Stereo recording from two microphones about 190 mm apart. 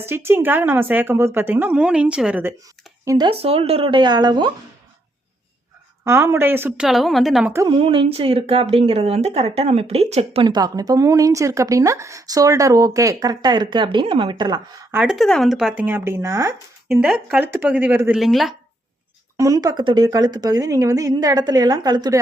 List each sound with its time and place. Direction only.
0.0 s a woman's voice: 10° right (ahead or behind)
3.2 s a woman's voice: 30° right (ahead or behind)
6.1 s a woman's voice: 15° right (ahead or behind)
7.5 s a woman's voice: 20° right (ahead or behind)
7.8 s a woman's voice: 30° right (ahead or behind)
14.9 s a woman's voice: 5° right (ahead or behind)
19.4 s a woman's voice: 20° right (ahead or behind)